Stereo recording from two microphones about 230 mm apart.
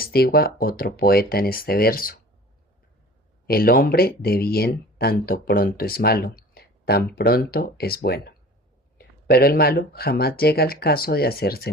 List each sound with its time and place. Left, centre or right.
0.0 s speech: left
3.4 s speech: left